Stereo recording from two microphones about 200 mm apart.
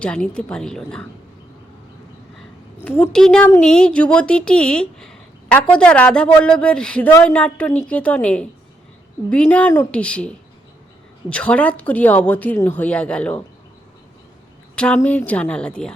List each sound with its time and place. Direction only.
0.0 s a woman's voice: 5° left (ahead or behind)
3.0 s a woman's voice: 5° left (ahead or behind)
14.8 s a woman's voice: 5° left (ahead or behind)